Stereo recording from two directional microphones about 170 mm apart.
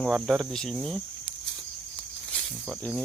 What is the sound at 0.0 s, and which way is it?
Cricket, centre (ahead or behind).